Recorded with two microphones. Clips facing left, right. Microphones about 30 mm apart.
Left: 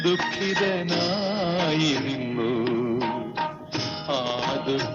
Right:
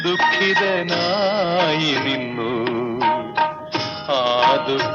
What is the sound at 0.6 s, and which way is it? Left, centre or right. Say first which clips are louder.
Music: right 5 dB; right.